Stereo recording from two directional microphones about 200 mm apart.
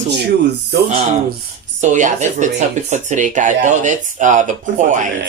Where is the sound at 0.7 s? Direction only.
50° right (ahead or behind).